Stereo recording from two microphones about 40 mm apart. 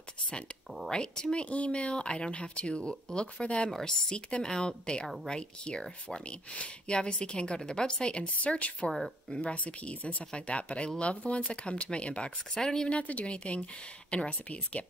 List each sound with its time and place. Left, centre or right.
0.8 s speech: centre
6.5 s speech: left
8.4 s speech: left
12.5 s speech: centre
12.9 s speech: left